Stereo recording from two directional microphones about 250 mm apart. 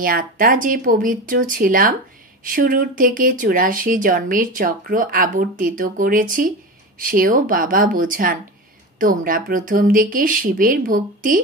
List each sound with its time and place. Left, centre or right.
0.0 s speech: right